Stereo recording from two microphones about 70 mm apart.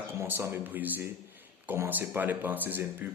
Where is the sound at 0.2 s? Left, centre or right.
Right.